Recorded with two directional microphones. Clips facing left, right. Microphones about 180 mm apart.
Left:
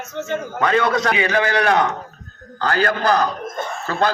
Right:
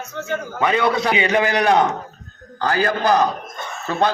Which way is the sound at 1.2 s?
25° right (ahead or behind).